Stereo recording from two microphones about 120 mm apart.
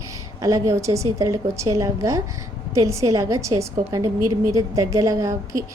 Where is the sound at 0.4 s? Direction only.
30° right (ahead or behind).